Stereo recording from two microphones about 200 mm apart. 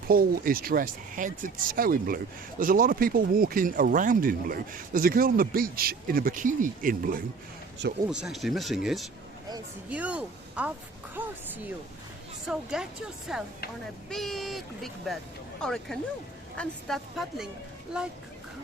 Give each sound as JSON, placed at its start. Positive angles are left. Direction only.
{"t": 0.1, "sound": "speech", "side_deg": -45}
{"t": 8.1, "sound": "speech", "side_deg": 0}